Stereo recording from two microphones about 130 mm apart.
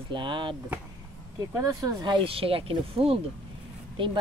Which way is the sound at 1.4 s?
25° right (ahead or behind).